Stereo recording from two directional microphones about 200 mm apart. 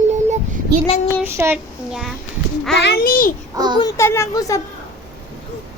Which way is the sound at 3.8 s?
15° left (ahead or behind).